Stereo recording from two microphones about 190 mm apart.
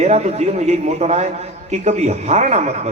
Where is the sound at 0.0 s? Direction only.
35° right (ahead or behind).